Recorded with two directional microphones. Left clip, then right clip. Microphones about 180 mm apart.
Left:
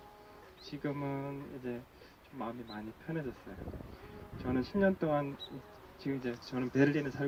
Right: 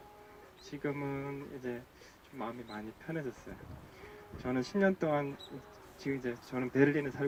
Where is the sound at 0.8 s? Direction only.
20° left (ahead or behind).